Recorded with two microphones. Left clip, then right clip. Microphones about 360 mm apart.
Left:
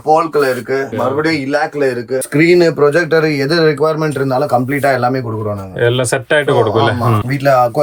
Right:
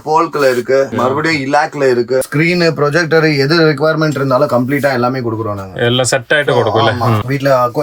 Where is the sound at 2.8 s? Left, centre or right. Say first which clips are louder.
Even; right.